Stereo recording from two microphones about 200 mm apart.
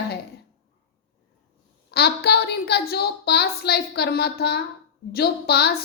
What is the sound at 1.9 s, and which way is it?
A woman's voice, 55° left (ahead or behind).